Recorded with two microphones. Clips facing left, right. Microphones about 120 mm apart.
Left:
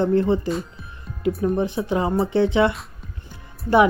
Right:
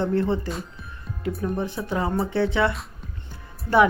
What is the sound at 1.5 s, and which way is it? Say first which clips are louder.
Speech: left 5 dB; 20° left (ahead or behind).